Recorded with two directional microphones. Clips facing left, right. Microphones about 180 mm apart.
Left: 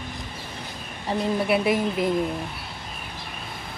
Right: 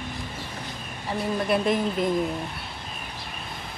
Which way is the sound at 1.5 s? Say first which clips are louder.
Right 1 dB; 5° left (ahead or behind).